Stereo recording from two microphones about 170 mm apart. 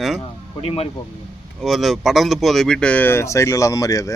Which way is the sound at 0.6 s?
35° left (ahead or behind).